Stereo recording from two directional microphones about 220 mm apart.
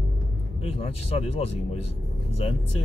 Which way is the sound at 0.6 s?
25° left (ahead or behind).